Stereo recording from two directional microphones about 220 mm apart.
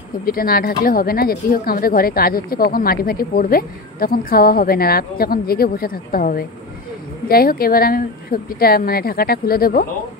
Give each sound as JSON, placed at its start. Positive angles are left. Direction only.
{"t": 0.2, "sound": "speech", "side_deg": 40}